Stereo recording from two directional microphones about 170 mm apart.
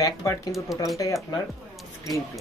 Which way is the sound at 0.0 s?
20° left (ahead or behind).